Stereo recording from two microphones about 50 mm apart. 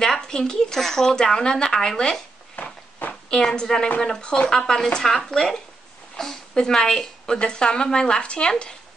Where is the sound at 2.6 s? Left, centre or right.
Left.